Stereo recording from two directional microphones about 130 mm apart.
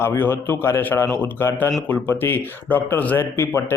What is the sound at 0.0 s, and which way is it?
Speech, 15° left (ahead or behind).